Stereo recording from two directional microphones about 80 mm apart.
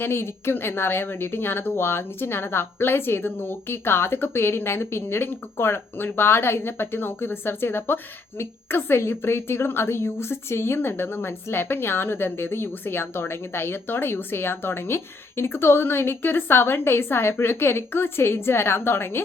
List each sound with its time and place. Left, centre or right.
0.0 s a woman's voice: left